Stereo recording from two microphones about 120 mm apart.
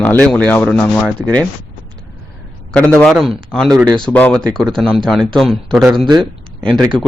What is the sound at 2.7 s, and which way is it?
A man's voice, 10° left (ahead or behind).